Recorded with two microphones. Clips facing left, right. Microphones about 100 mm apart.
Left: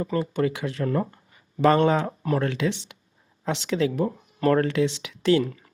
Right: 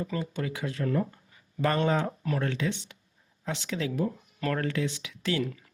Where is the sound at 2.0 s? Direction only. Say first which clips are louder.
Left 6 dB; 35° left (ahead or behind).